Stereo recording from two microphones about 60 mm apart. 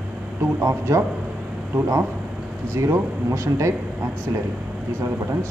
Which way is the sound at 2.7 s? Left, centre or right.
Right.